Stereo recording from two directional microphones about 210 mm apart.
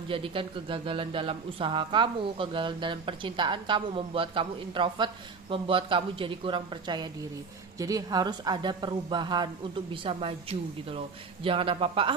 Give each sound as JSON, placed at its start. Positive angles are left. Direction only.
{"t": 0.1, "sound": "speech", "side_deg": -25}
{"t": 11.4, "sound": "speech", "side_deg": -25}